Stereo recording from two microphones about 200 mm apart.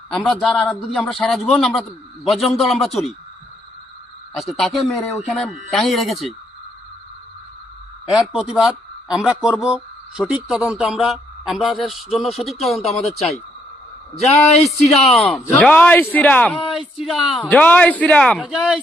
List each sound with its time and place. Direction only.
0.1 s speech: centre (ahead or behind)
4.4 s speech: centre (ahead or behind)
8.0 s speech: 5° right (ahead or behind)
13.1 s speech: 30° left (ahead or behind)
14.9 s a man's voice: centre (ahead or behind)